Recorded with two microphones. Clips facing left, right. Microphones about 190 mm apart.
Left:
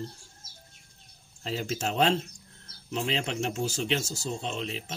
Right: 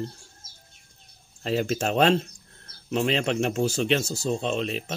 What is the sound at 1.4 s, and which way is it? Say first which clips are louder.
Speech: right 6 dB; 65° right (ahead or behind).